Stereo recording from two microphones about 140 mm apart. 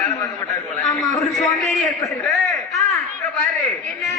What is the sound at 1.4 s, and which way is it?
Speech, centre (ahead or behind).